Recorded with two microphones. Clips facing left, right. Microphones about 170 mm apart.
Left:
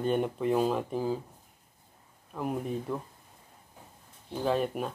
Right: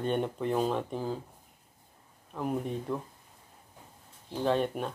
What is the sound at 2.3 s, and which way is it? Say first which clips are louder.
Speech: even; 5° left (ahead or behind).